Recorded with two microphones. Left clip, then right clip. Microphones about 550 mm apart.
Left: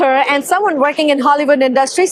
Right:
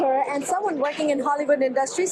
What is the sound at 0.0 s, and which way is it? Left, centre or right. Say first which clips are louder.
A woman's voice: left 10 dB; left.